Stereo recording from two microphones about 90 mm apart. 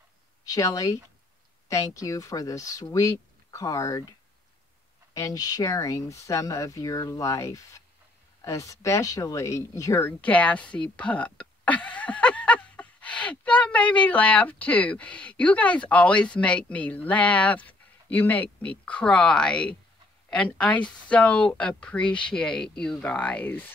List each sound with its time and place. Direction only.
0.5 s speech: 40° left (ahead or behind)
5.1 s speech: 40° left (ahead or behind)
10.0 s a woman's voice: 15° left (ahead or behind)